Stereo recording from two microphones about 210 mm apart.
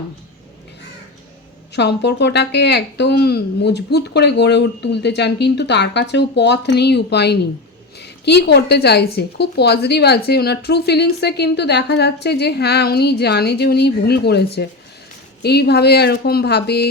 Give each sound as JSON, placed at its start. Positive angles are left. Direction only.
{"t": 1.7, "sound": "speech", "side_deg": 55}